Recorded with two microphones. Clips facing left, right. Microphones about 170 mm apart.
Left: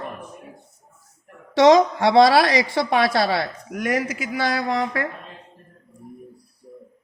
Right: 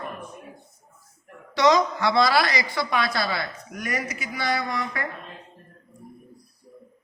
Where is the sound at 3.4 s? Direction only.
90° left.